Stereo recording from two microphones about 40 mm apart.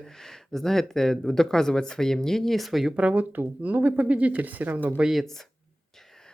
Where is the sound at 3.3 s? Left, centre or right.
Right.